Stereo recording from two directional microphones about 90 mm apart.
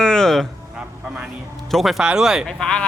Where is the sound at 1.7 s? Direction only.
Centre (ahead or behind).